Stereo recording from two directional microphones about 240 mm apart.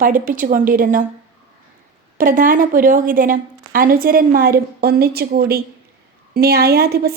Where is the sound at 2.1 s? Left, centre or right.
Right.